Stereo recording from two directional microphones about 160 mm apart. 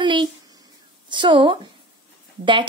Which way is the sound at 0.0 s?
30° right (ahead or behind).